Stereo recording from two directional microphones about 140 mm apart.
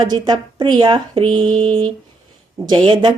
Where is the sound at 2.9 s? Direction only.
30° right (ahead or behind).